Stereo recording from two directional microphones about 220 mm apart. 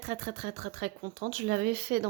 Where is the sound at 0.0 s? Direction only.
35° right (ahead or behind).